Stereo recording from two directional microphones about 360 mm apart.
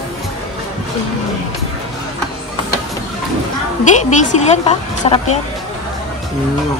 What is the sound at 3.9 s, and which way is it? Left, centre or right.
A woman's voice, centre.